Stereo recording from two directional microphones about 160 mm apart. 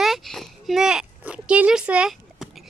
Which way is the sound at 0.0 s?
Centre (ahead or behind).